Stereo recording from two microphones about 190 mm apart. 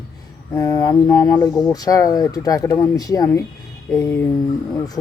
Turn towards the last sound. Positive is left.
turn(degrees=20)  # may be behind; listen again after turning